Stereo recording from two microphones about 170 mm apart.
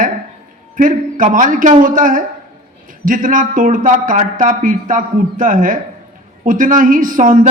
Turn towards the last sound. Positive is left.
turn(degrees=-50)  # may be behind; listen again after turning